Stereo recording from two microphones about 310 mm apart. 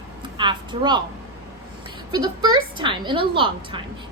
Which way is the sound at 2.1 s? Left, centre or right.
Centre.